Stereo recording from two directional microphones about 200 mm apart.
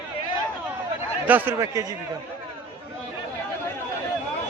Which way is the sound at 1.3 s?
10° right (ahead or behind).